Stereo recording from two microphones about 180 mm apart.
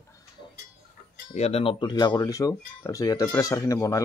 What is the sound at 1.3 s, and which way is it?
Speech, 35° left (ahead or behind).